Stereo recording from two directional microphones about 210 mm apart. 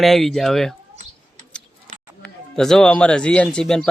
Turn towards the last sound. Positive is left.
turn(degrees=5)  # may be behind; listen again after turning